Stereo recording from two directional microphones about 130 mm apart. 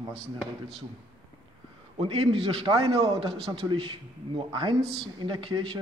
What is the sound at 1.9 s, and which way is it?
A man's voice, 45° right (ahead or behind).